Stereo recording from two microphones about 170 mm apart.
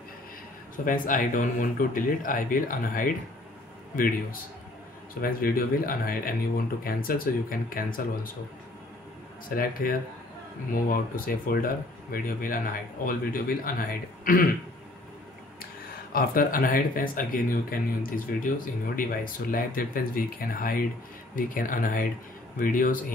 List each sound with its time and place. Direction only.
0.8 s speech: 50° left (ahead or behind)
9.6 s speech: 55° left (ahead or behind)
16.1 s speech: 55° left (ahead or behind)